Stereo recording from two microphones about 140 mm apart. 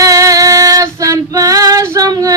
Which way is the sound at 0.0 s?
25° right (ahead or behind).